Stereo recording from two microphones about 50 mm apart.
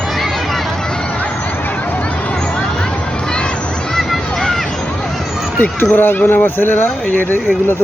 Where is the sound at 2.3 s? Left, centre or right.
Centre.